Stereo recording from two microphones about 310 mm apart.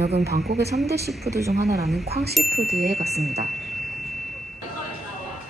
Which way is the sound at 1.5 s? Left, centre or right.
Right.